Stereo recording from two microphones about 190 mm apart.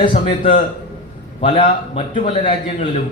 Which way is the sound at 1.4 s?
35° left (ahead or behind).